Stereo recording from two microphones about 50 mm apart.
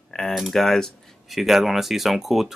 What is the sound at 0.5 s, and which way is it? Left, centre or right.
Speech, centre.